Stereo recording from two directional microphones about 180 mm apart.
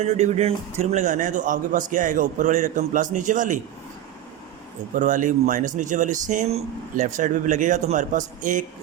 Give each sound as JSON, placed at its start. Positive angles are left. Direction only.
{"t": 0.0, "sound": "speech", "side_deg": -40}
{"t": 4.9, "sound": "speech", "side_deg": -45}